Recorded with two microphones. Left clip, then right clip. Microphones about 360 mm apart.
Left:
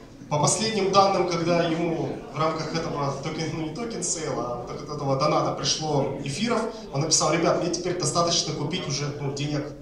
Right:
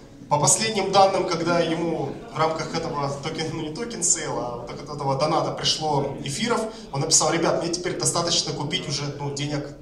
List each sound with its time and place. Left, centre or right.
0.3 s a man's voice: right
5.0 s a man's voice: right